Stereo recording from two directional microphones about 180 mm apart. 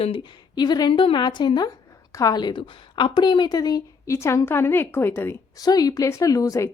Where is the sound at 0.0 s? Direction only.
30° left (ahead or behind).